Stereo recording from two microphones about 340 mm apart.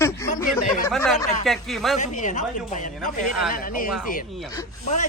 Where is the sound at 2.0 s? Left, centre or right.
Left.